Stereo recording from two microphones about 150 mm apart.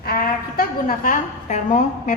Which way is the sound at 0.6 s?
65° left (ahead or behind).